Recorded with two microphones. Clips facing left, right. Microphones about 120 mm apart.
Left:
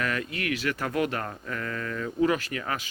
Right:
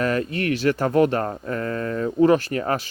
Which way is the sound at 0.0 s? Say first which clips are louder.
Right 8 dB; 35° right (ahead or behind).